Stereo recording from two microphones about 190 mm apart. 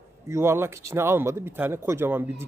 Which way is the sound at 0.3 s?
15° right (ahead or behind).